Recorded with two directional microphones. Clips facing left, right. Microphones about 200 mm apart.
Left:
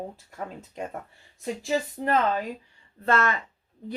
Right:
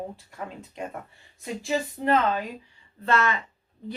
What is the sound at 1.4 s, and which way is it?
Speech, 35° left (ahead or behind).